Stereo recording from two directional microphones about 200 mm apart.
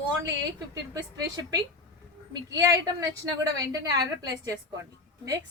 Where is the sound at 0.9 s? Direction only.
15° right (ahead or behind).